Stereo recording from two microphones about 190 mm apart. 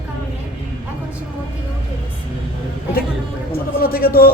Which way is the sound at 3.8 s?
50° left (ahead or behind).